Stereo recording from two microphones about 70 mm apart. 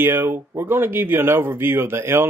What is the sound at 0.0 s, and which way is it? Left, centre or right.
Speech, right.